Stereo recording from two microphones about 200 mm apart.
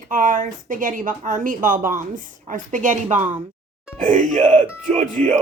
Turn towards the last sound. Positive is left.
turn(degrees=-35)  # may be behind; listen again after turning